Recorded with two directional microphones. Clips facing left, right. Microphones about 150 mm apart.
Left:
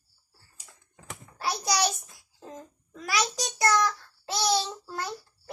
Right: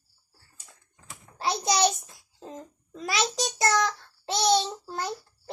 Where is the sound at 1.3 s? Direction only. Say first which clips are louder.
Right 2 dB; 20° right (ahead or behind).